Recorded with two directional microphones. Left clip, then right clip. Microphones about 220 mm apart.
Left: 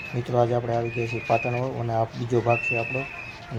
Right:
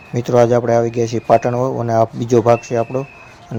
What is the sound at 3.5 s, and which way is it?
Speech, 30° right (ahead or behind).